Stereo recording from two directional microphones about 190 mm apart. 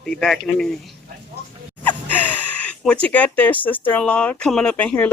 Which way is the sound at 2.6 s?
5° left (ahead or behind).